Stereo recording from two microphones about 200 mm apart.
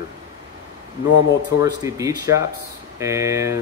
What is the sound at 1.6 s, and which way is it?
Speech, 15° right (ahead or behind).